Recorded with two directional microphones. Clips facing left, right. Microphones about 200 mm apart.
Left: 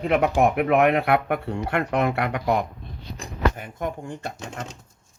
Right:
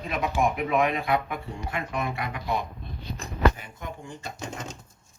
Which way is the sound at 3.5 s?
55° left (ahead or behind).